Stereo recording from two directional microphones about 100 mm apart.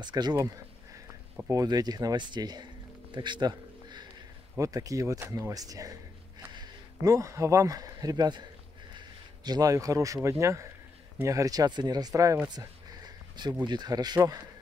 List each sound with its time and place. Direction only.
0.0 s speech: 45° right (ahead or behind)
1.5 s speech: 40° right (ahead or behind)
4.6 s speech: 35° right (ahead or behind)
7.0 s speech: 35° right (ahead or behind)
13.4 s speech: 45° right (ahead or behind)